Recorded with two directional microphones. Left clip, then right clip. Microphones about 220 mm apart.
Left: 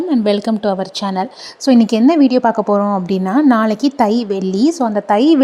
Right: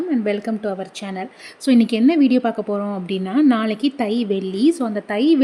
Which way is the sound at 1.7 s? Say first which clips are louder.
Left 4 dB; 15° left (ahead or behind).